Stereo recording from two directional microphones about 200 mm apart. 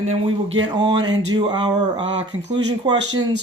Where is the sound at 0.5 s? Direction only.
20° right (ahead or behind).